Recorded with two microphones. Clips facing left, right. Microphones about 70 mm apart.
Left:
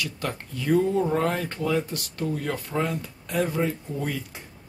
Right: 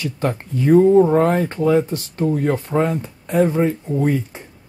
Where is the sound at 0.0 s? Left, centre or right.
Right.